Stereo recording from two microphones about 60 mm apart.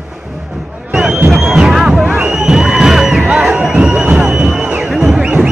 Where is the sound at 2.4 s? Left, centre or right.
Centre.